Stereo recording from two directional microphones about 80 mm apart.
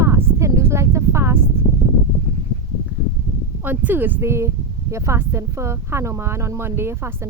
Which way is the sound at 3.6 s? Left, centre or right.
Right.